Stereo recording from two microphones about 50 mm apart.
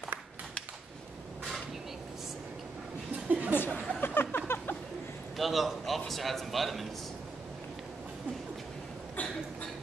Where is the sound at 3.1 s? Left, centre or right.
Right.